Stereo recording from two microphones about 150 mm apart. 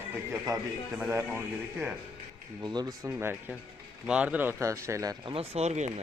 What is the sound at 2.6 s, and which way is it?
Speech, 30° right (ahead or behind).